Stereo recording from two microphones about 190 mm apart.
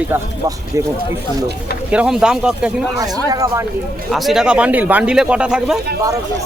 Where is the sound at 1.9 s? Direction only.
5° right (ahead or behind).